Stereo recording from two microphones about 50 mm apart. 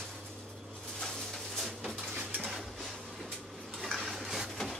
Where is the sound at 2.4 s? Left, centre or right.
Centre.